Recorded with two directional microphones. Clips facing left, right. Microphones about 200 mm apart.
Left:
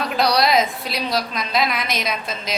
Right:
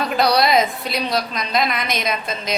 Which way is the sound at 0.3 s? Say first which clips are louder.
Right 1 dB; centre (ahead or behind).